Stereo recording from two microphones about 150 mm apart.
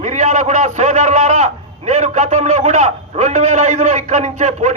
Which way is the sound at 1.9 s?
50° right (ahead or behind).